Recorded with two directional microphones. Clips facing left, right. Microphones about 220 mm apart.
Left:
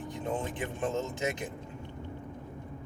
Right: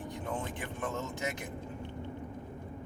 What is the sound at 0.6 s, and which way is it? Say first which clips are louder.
Speech: left 5 dB; 25° left (ahead or behind).